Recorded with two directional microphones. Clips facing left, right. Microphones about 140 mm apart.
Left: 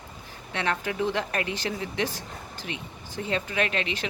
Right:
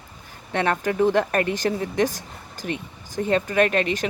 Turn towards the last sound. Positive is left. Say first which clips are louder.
# right 8 dB
turn(degrees=-45)  # may be behind; listen again after turning